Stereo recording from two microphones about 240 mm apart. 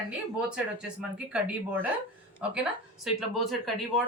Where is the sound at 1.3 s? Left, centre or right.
Centre.